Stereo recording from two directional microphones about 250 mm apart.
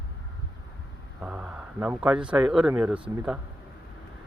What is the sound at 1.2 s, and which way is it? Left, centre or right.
Speech, centre.